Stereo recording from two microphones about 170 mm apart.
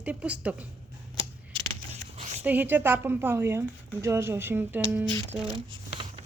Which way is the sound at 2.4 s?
10° right (ahead or behind).